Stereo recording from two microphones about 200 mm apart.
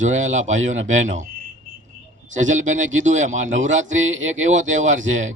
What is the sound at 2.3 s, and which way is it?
Speech, 40° right (ahead or behind).